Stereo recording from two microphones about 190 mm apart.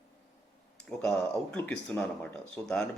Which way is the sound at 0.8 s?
5° left (ahead or behind).